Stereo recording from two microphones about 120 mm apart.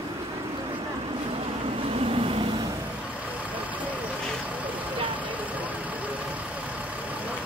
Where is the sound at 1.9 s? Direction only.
50° right (ahead or behind).